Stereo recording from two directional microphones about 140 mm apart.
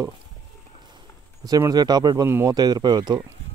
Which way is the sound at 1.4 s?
25° right (ahead or behind).